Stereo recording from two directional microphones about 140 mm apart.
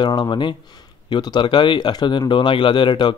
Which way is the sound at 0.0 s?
30° left (ahead or behind).